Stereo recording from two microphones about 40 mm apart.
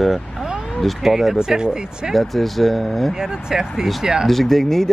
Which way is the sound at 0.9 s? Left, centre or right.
Centre.